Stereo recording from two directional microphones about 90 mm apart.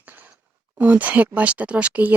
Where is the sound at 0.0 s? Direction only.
20° right (ahead or behind).